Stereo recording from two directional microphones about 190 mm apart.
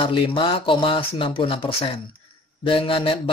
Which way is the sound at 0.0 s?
25° left (ahead or behind).